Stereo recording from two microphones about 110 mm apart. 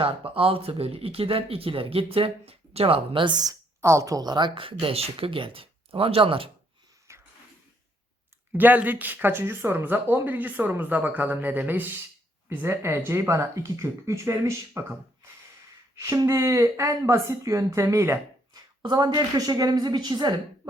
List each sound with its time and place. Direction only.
0.0 s speech: 55° right (ahead or behind)
7.1 s a sound: 25° right (ahead or behind)
8.5 s speech: 15° right (ahead or behind)
16.0 s speech: 30° right (ahead or behind)
18.5 s a woman's voice: 40° right (ahead or behind)